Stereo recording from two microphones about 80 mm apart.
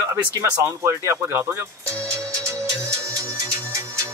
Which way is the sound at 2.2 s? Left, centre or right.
Right.